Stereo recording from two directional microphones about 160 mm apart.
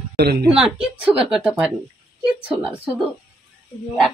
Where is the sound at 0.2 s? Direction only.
75° right (ahead or behind).